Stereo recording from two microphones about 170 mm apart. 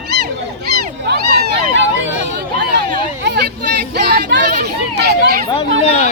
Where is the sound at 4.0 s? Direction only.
70° right (ahead or behind).